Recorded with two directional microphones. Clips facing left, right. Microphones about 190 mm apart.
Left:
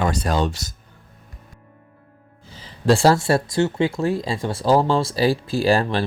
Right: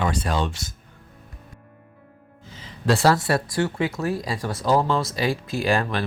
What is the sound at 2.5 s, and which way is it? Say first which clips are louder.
Speech: left 5 dB; 30° left (ahead or behind).